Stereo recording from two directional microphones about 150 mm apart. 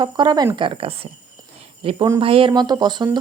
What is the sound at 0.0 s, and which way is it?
Speech, 30° right (ahead or behind).